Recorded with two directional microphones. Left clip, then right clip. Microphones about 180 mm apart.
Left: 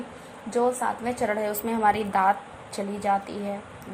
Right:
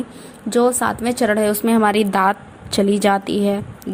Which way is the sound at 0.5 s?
35° right (ahead or behind).